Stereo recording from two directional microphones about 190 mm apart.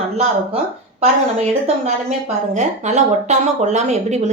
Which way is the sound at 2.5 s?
40° right (ahead or behind).